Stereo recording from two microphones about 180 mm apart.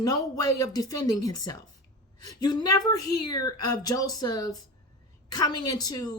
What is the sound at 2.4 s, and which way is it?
A woman's voice, 25° left (ahead or behind).